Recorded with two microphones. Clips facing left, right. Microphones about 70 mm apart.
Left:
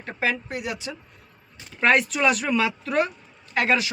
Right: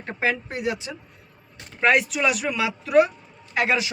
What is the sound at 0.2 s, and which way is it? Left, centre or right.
Speech, right.